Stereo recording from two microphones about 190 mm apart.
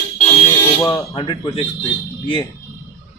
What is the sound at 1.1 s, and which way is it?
Speech, 25° left (ahead or behind).